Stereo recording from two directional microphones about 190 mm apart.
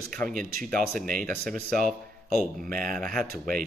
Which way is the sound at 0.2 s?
5° left (ahead or behind).